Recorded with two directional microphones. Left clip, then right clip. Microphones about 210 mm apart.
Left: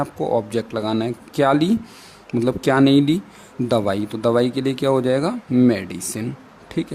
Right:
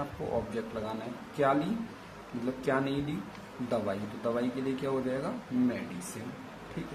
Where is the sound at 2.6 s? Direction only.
60° left (ahead or behind).